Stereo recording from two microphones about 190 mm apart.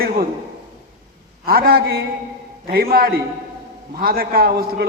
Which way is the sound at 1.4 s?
50° right (ahead or behind).